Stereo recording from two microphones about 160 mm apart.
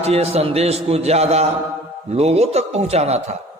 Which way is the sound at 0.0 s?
40° right (ahead or behind).